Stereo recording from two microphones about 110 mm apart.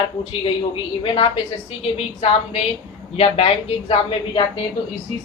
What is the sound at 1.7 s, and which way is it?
A woman's voice, 65° left (ahead or behind).